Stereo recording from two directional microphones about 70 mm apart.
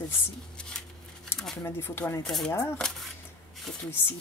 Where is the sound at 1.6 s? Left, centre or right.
Left.